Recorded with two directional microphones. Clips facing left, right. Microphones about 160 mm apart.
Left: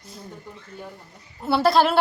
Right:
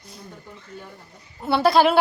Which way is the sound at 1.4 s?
Centre (ahead or behind).